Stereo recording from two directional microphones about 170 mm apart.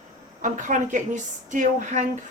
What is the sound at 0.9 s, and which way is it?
A woman's voice, 45° right (ahead or behind).